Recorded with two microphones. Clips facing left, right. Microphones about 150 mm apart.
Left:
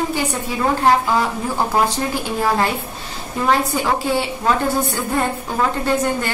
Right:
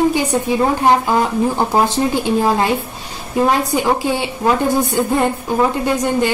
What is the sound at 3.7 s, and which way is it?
A woman's voice, 15° right (ahead or behind).